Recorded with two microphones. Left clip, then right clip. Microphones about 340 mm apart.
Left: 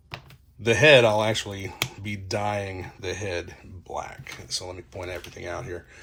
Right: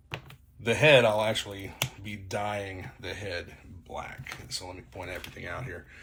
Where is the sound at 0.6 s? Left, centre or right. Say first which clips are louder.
Left 4 dB; centre.